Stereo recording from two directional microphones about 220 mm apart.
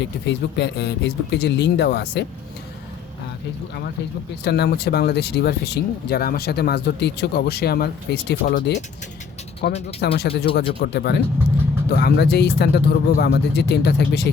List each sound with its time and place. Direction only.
0.0 s speech: 50° left (ahead or behind)
4.4 s speech: 50° left (ahead or behind)